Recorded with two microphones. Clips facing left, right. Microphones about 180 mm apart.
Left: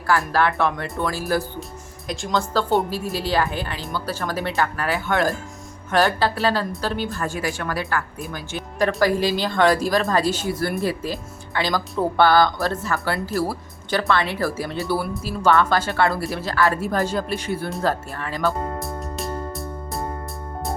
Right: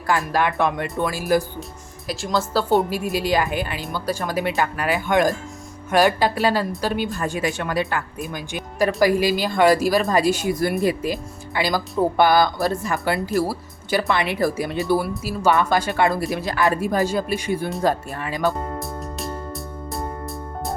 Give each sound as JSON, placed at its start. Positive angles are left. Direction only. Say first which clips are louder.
{"t": 0.1, "sound": "speech", "louder": "left 1 dB", "side_deg": -15}
{"t": 2.0, "sound": "speech", "louder": "right 1 dB", "side_deg": 0}
{"t": 18.8, "sound": "music", "louder": "left 1 dB", "side_deg": 0}